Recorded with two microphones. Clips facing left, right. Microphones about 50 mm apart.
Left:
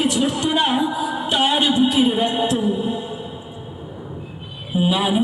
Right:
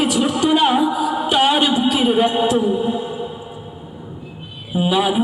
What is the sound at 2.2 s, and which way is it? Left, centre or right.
Speech, centre.